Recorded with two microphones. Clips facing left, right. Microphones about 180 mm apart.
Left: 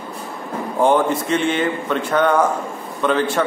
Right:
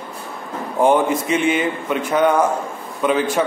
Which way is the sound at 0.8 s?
5° right (ahead or behind).